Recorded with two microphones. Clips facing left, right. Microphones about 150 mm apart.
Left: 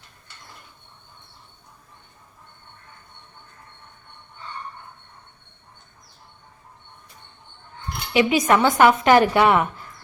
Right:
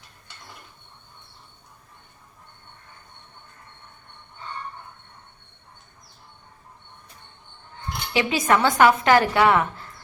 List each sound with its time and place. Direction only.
8.1 s speech: 20° left (ahead or behind)